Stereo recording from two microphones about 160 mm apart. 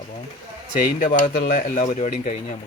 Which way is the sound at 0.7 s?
50° left (ahead or behind).